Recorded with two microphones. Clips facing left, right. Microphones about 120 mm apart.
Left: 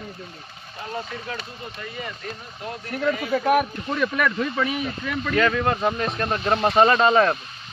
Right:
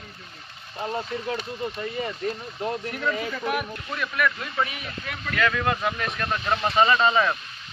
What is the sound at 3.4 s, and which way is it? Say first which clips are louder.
Speech: left 11 dB; 50° left (ahead or behind).